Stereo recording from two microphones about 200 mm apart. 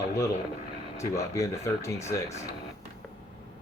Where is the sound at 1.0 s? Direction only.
15° left (ahead or behind).